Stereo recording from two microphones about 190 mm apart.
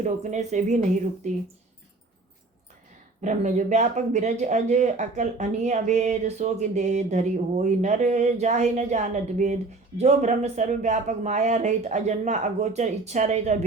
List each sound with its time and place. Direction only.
0.0 s speech: 40° right (ahead or behind)
3.2 s speech: 40° right (ahead or behind)